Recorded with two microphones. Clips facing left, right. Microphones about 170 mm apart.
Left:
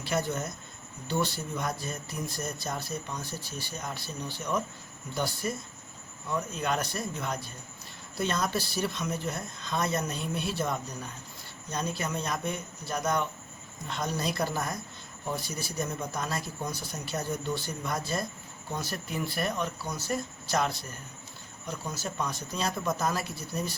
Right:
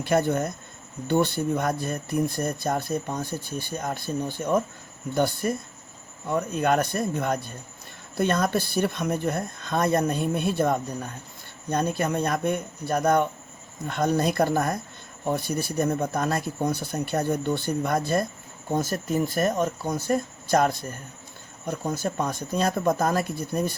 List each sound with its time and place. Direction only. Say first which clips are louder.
0.0 s speech: right 8 dB; 55° right (ahead or behind)